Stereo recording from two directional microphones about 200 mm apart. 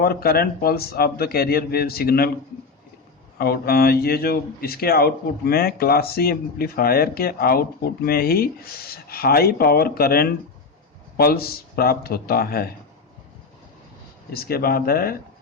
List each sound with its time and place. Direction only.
0.0 s speech: 50° left (ahead or behind)
3.3 s speech: 50° left (ahead or behind)
14.3 s speech: 50° left (ahead or behind)